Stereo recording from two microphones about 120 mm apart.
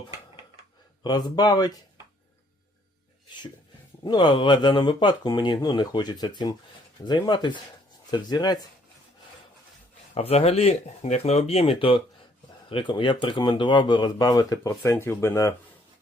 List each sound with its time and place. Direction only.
1.0 s speech: 35° left (ahead or behind)
4.0 s speech: 40° left (ahead or behind)
10.2 s speech: 60° left (ahead or behind); by 15.5 s 25° left (ahead or behind)